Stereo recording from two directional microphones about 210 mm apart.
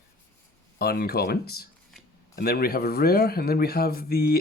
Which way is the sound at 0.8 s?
45° left (ahead or behind).